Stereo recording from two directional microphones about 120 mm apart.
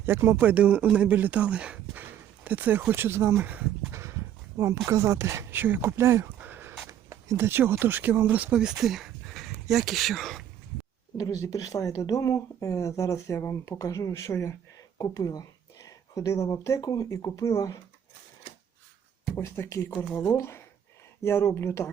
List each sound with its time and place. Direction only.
0.0 s speech: 20° right (ahead or behind); by 10.4 s centre (ahead or behind)
11.5 s speech: 30° left (ahead or behind)
19.4 s speech: 20° left (ahead or behind)